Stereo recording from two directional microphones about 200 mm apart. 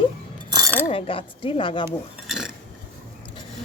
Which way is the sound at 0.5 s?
15° right (ahead or behind).